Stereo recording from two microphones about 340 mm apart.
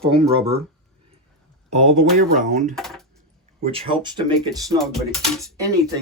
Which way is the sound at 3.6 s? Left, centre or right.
Centre.